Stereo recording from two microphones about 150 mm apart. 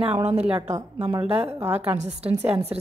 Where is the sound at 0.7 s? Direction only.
20° right (ahead or behind).